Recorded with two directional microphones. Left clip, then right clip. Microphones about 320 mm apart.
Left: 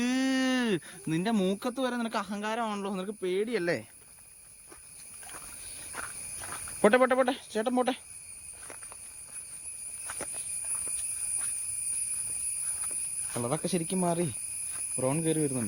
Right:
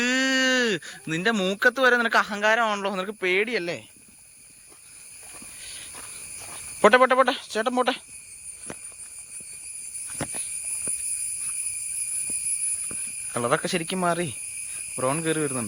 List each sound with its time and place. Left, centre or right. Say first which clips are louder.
0.0 s a sound: right 8 dB; centre
1.6 s a man's voice: right 13 dB; centre
6.8 s a man's voice: right 6 dB; centre
13.3 s speech: right 9 dB; centre
13.6 s a man's voice: right 6 dB; centre
13.9 s speech: right 6 dB; centre
14.9 s a man's voice: right 4 dB; centre